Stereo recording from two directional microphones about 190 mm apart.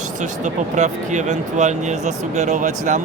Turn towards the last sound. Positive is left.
turn(degrees=-40)  # may be behind; listen again after turning